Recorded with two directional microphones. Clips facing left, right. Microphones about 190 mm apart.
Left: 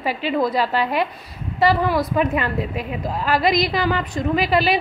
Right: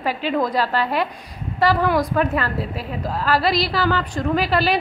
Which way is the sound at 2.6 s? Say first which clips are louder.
Left 2 dB; 35° right (ahead or behind).